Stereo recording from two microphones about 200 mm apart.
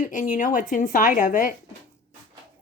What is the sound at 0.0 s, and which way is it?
A woman's voice, 40° left (ahead or behind).